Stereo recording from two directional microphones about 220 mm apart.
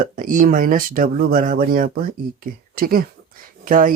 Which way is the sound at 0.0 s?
35° right (ahead or behind).